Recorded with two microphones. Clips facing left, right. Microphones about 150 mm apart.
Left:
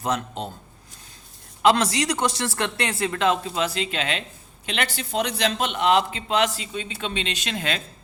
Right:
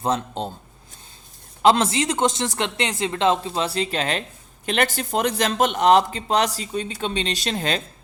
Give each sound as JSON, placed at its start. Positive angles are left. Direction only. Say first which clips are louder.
{"t": 0.0, "sound": "speech", "louder": "right 3 dB", "side_deg": -30}
{"t": 1.6, "sound": "a man's voice", "louder": "right 2 dB", "side_deg": -25}